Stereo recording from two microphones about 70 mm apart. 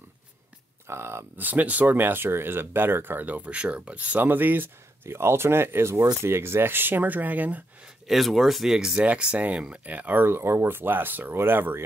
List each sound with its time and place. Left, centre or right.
0.8 s speech: right
1.4 s speech: right
7.8 s speech: centre; by 11.8 s right